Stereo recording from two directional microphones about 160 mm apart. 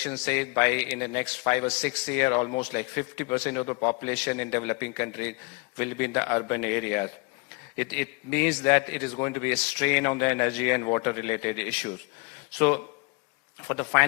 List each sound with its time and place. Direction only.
0.1 s a man's voice: 10° left (ahead or behind)
4.0 s a man's voice: 15° left (ahead or behind)